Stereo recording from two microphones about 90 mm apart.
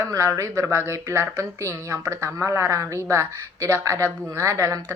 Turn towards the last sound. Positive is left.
turn(degrees=-35)  # may be behind; listen again after turning